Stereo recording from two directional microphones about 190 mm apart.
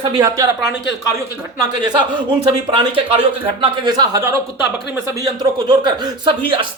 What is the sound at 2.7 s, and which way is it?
A man's voice, 30° right (ahead or behind).